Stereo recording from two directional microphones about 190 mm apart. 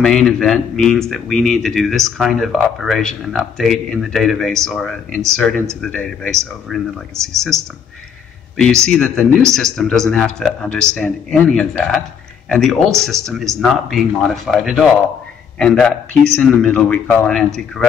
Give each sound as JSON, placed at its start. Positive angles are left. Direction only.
{"t": 0.0, "sound": "speech", "side_deg": 5}
{"t": 8.5, "sound": "speech", "side_deg": 5}